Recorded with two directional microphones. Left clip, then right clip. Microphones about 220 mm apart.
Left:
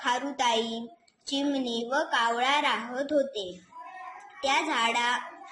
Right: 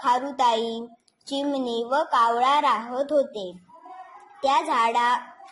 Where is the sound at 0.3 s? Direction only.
40° right (ahead or behind).